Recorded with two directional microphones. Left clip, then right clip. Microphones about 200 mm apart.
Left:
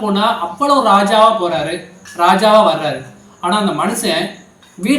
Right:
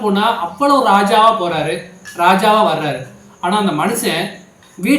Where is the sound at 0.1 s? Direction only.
5° right (ahead or behind).